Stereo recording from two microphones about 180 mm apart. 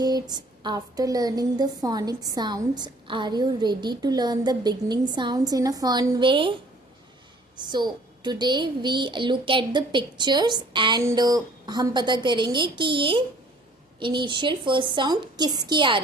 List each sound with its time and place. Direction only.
0.0 s a woman's voice: 25° right (ahead or behind)
7.5 s a woman's voice: 25° right (ahead or behind)